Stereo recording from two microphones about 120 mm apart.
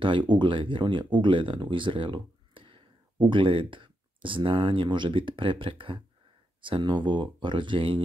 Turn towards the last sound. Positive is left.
turn(degrees=-45)  # may be behind; listen again after turning